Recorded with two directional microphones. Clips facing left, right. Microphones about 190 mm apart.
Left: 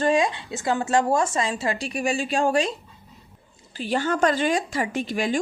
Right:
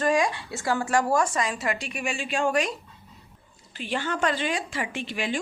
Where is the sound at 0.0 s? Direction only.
25° left (ahead or behind).